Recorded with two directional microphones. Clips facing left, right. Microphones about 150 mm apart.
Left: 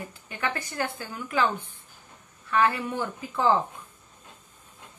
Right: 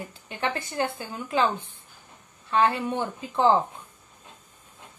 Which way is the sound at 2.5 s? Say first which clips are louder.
Right 1 dB; 25° right (ahead or behind).